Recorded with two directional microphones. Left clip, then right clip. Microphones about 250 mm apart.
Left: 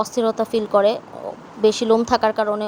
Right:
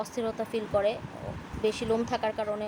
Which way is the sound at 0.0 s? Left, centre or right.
Left.